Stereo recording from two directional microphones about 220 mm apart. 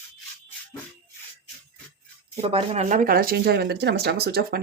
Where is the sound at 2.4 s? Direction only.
25° right (ahead or behind).